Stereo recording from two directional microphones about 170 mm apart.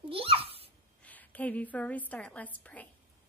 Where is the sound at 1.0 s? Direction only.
10° left (ahead or behind).